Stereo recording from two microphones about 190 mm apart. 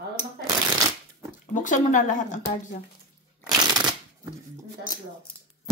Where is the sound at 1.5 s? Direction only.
40° left (ahead or behind).